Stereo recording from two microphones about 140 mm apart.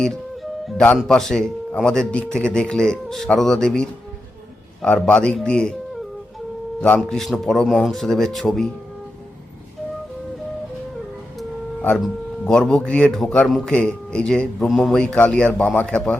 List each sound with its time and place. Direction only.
0.8 s speech: 5° left (ahead or behind)
11.3 s speech: 5° left (ahead or behind)